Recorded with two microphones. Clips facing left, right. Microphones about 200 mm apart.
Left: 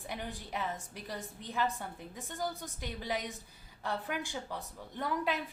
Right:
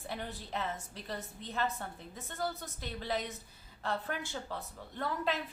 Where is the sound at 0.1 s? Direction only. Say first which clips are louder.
Even; 15° left (ahead or behind).